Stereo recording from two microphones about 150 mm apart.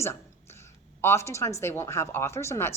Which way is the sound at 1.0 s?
20° left (ahead or behind).